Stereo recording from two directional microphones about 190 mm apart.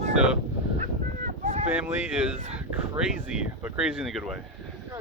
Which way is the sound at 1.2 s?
40° right (ahead or behind).